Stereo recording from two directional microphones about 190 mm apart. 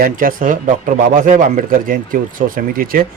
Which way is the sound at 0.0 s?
50° right (ahead or behind).